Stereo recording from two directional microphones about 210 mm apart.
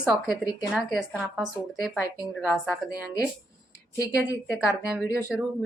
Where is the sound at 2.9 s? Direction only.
15° left (ahead or behind).